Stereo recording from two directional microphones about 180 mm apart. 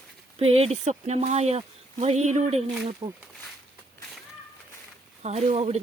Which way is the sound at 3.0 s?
25° right (ahead or behind).